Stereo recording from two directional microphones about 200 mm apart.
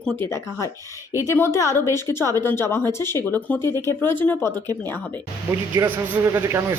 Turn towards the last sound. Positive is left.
turn(degrees=-15)  # may be behind; listen again after turning